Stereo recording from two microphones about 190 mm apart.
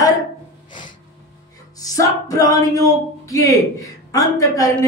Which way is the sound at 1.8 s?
20° left (ahead or behind).